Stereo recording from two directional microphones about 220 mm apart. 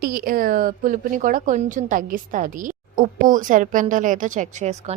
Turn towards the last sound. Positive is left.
turn(degrees=-30)  # may be behind; listen again after turning